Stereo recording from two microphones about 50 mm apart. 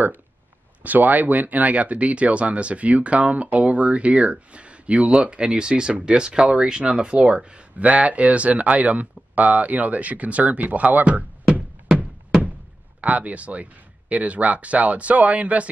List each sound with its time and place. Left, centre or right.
0.8 s speech: right
13.0 s speech: right